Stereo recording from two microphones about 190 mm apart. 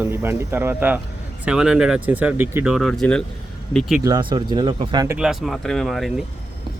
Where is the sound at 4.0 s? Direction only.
20° right (ahead or behind).